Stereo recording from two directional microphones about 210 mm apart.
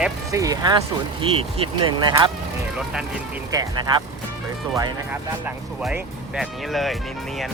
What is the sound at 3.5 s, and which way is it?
Speech, 15° right (ahead or behind).